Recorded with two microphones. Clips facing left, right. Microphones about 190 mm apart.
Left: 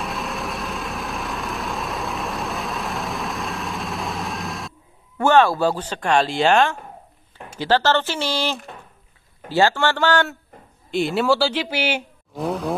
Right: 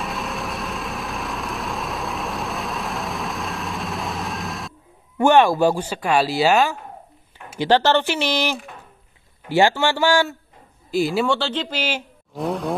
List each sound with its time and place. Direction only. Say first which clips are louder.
0.0 s vehicle: even; centre (ahead or behind)
5.1 s speech: right 1 dB; 15° right (ahead or behind)
7.5 s speech: right 2 dB; 15° right (ahead or behind); by 11.8 s 10° left (ahead or behind)
12.4 s vehicle: even; centre (ahead or behind)